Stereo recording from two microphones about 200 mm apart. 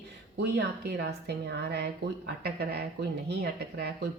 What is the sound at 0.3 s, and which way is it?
A woman's voice, 55° right (ahead or behind).